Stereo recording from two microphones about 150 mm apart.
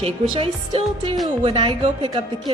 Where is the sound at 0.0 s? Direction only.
40° right (ahead or behind).